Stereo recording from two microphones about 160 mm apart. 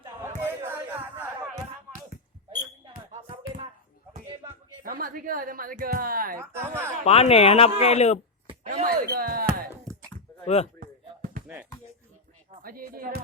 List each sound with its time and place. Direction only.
0.4 s music: 15° right (ahead or behind)
4.8 s a woman's voice: 65° right (ahead or behind)
6.4 s speech: 15° right (ahead or behind)
7.0 s speech: 40° left (ahead or behind)
8.6 s speech: 60° right (ahead or behind)
10.4 s speech: 40° left (ahead or behind)
10.8 s music: 60° right (ahead or behind)
12.5 s speech: 65° right (ahead or behind)